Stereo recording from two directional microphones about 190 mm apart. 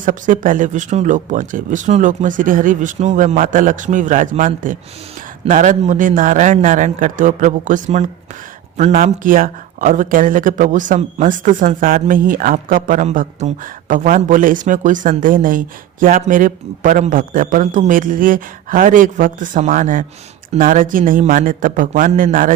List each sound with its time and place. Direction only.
0.0 s speech: 45° right (ahead or behind)